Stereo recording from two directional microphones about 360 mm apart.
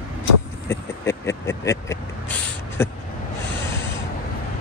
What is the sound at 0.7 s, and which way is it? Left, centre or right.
Vehicle, centre.